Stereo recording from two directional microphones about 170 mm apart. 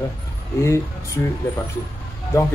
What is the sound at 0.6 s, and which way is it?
Speech, 15° left (ahead or behind).